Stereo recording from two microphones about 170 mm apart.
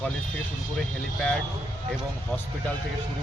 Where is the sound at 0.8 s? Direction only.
5° left (ahead or behind).